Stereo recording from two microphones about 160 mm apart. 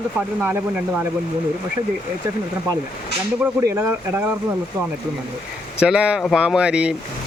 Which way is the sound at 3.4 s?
15° right (ahead or behind).